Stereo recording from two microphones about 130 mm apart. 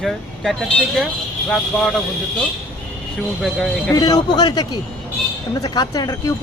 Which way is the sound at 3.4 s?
Centre (ahead or behind).